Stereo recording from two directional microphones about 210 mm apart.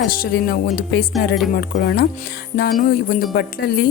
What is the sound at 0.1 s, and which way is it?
Speech, 45° left (ahead or behind).